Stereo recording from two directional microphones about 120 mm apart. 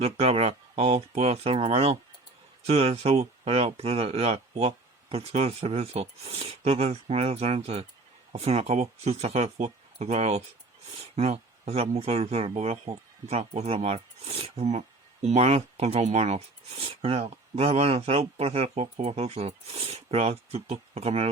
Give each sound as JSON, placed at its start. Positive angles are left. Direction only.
{"t": 0.0, "sound": "speech", "side_deg": -55}